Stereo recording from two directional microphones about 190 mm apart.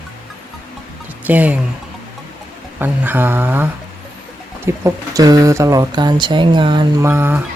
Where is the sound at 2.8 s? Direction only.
10° right (ahead or behind).